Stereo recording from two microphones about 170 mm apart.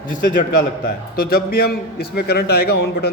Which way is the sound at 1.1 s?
65° left (ahead or behind).